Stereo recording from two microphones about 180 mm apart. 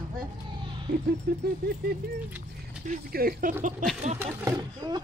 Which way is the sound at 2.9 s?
55° right (ahead or behind).